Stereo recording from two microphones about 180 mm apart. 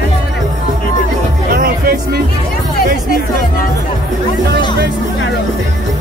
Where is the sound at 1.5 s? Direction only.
55° right (ahead or behind).